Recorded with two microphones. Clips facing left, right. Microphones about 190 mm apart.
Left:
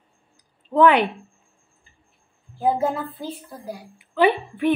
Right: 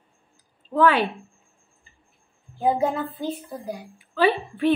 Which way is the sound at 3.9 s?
20° left (ahead or behind).